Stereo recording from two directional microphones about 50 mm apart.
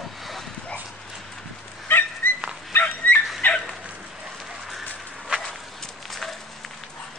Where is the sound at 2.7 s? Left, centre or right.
Left.